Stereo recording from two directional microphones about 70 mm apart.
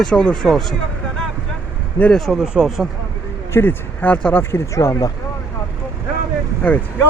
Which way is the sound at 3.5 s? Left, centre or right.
Left.